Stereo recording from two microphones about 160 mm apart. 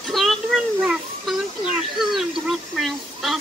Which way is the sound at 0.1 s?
Centre (ahead or behind).